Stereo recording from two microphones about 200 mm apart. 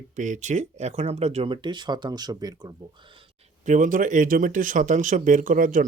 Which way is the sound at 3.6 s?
40° right (ahead or behind).